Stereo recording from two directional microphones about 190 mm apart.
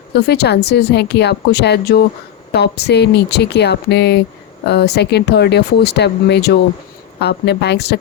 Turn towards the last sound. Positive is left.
turn(degrees=60)  # may be behind; listen again after turning